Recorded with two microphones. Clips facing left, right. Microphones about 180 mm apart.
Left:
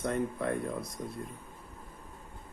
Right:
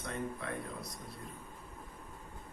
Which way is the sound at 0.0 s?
50° left (ahead or behind).